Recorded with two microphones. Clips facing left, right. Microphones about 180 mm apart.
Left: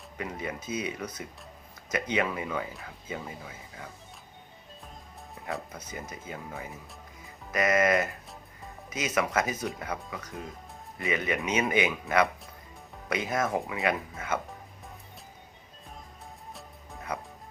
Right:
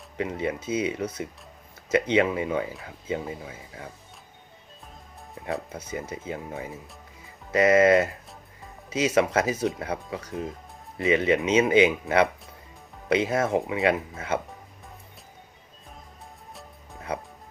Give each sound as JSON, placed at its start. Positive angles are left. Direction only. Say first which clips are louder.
{"t": 0.2, "sound": "speech", "louder": "right 7 dB", "side_deg": -25}
{"t": 5.7, "sound": "speech", "louder": "right 7 dB", "side_deg": -30}